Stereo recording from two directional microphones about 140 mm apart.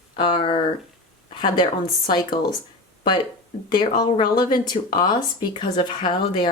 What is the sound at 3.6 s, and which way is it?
Speech, 30° left (ahead or behind).